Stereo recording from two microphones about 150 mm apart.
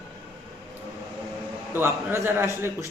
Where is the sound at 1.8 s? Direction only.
15° right (ahead or behind).